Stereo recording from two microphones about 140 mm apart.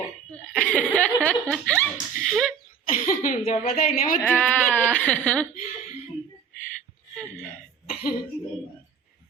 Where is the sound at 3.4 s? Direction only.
45° left (ahead or behind).